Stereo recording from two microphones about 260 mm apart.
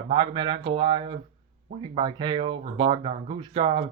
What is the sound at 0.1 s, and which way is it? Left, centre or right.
Speech, centre.